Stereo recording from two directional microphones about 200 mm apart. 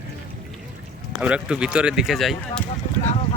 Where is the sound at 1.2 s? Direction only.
5° right (ahead or behind).